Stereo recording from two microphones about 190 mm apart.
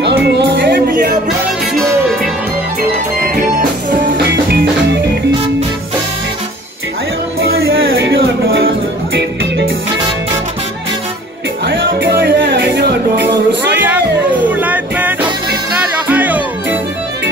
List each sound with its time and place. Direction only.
0.0 s music: 65° right (ahead or behind)
0.8 s music: 45° right (ahead or behind)
2.8 s music: 50° right (ahead or behind)
7.7 s music: 60° right (ahead or behind)
11.6 s music: 65° right (ahead or behind)
13.7 s a sound: 10° right (ahead or behind)
14.5 s music: 10° right (ahead or behind)